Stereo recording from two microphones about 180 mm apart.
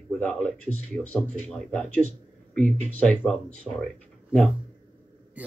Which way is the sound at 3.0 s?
5° left (ahead or behind).